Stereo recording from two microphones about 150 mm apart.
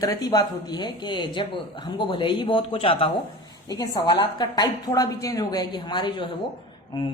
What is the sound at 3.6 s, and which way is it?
A woman's voice, 25° left (ahead or behind).